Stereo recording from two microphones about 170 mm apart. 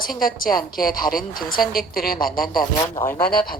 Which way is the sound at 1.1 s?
55° left (ahead or behind).